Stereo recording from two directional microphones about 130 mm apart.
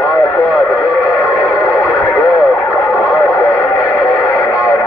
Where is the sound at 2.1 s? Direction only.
20° left (ahead or behind).